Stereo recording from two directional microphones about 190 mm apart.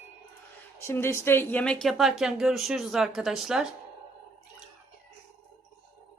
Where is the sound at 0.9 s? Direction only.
15° left (ahead or behind); by 3.7 s centre (ahead or behind).